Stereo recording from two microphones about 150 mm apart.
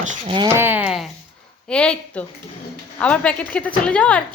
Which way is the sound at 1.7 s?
5° left (ahead or behind).